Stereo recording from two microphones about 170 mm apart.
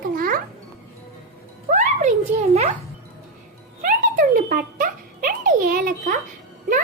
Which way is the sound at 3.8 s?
55° right (ahead or behind).